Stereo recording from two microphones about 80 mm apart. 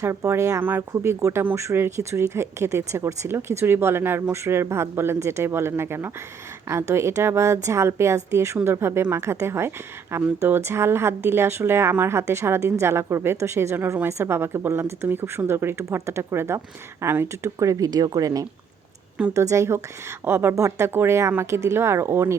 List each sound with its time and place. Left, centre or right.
0.0 s speech: right
0.6 s speech: right
17.6 s speech: right